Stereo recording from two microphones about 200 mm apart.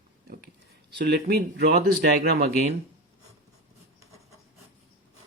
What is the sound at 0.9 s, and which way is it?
Speech, 50° right (ahead or behind).